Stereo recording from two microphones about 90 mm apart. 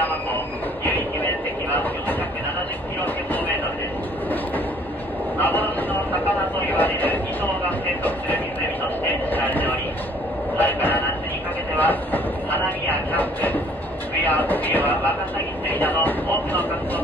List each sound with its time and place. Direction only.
5.4 s a sound: 20° left (ahead or behind)
6.7 s speech: 20° left (ahead or behind)
9.3 s train: 20° left (ahead or behind)
14.2 s speech: 20° left (ahead or behind)